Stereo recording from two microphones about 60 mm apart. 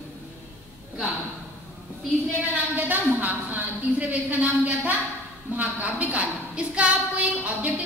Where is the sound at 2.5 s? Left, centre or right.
Right.